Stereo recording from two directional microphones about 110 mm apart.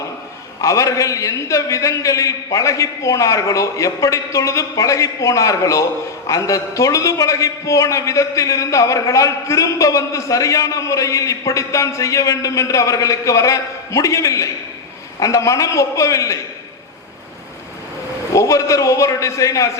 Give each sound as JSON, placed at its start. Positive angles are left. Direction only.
{"t": 0.6, "sound": "a man's voice", "side_deg": 30}
{"t": 18.3, "sound": "a man's voice", "side_deg": 30}